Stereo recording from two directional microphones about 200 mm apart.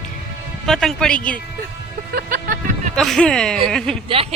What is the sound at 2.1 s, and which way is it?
Music, 45° right (ahead or behind).